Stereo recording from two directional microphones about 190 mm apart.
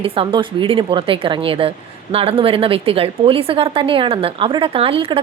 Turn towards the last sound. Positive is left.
turn(degrees=-30)  # may be behind; listen again after turning